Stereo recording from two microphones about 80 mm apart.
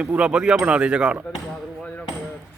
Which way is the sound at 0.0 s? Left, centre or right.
Centre.